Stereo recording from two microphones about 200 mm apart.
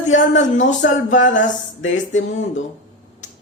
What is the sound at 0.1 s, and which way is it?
Speech, 70° left (ahead or behind).